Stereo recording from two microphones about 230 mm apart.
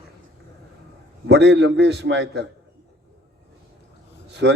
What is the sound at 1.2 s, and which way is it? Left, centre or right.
A man's voice, right.